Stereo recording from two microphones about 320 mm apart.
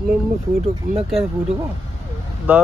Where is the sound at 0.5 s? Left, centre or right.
Centre.